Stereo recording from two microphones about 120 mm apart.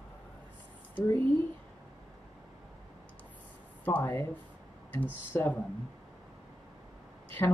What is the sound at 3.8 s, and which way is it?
Speech, 15° left (ahead or behind).